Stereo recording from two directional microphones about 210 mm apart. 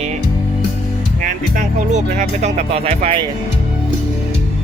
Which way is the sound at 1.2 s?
40° right (ahead or behind).